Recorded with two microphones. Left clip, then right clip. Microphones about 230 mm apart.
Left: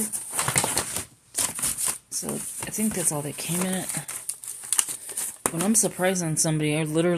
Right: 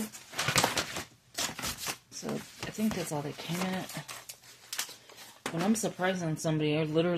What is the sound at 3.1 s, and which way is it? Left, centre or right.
Speech, left.